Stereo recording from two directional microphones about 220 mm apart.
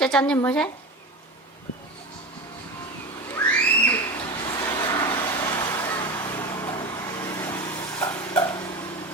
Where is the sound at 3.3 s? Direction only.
10° left (ahead or behind).